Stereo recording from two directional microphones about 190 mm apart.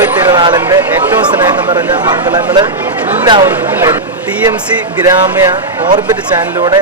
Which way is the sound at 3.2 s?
20° right (ahead or behind).